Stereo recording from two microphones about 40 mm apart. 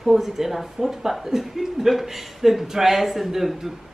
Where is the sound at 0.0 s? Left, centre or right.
Centre.